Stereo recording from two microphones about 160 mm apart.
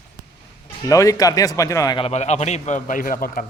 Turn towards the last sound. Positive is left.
turn(degrees=60)  # may be behind; listen again after turning